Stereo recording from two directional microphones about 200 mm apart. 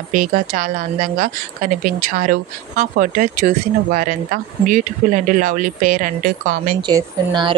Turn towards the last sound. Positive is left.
turn(degrees=-20)  # may be behind; listen again after turning